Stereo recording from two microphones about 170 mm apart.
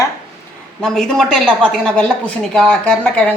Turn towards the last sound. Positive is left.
turn(degrees=10)  # may be behind; listen again after turning